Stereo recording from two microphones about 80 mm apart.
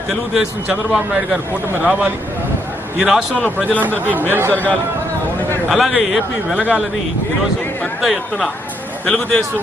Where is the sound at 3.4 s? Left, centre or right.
Centre.